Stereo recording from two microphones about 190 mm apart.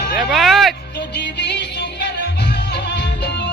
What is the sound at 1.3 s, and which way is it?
Music, 65° left (ahead or behind).